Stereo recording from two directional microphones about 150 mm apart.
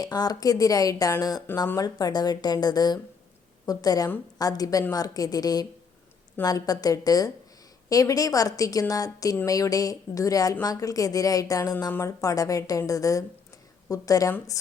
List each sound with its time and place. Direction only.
0.0 s a woman's voice: 25° left (ahead or behind)